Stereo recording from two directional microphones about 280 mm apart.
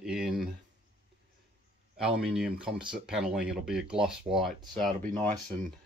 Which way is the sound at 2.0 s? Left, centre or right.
Centre.